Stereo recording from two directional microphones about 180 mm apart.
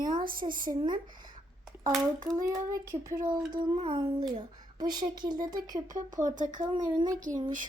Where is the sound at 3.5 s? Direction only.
25° right (ahead or behind).